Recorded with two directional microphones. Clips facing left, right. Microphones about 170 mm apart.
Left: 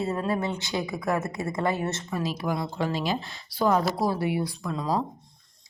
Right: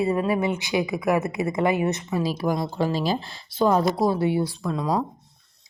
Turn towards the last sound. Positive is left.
turn(degrees=-25)  # may be behind; listen again after turning